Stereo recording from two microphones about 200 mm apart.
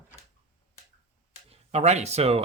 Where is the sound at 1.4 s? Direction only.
35° right (ahead or behind).